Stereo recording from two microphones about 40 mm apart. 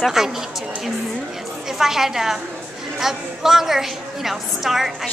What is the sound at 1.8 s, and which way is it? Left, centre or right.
A woman's voice, centre.